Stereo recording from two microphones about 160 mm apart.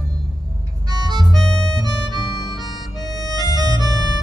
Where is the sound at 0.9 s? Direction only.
25° right (ahead or behind).